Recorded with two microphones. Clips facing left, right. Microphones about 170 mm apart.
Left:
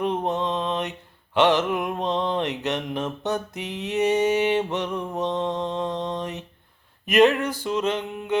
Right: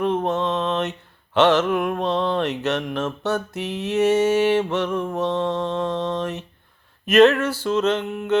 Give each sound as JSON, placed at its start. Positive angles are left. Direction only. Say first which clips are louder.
{"t": 0.0, "sound": "mantra", "louder": "right 3 dB", "side_deg": 15}